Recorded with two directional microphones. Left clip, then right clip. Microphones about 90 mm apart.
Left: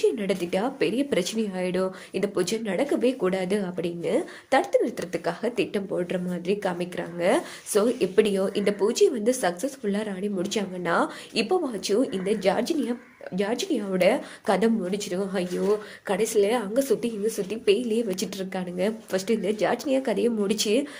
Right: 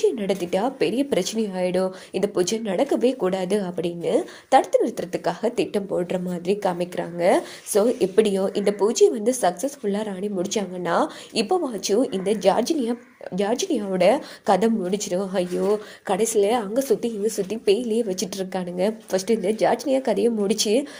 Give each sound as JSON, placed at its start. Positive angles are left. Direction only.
{"t": 0.0, "sound": "a woman's voice", "side_deg": -30}
{"t": 7.3, "sound": "a woman's voice", "side_deg": -25}
{"t": 16.7, "sound": "speech", "side_deg": -25}
{"t": 17.2, "sound": "a woman's voice", "side_deg": -40}
{"t": 17.7, "sound": "speech", "side_deg": -25}
{"t": 18.3, "sound": "a woman's voice", "side_deg": -40}